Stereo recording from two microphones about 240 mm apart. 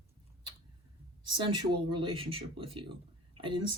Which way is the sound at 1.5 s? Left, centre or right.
Right.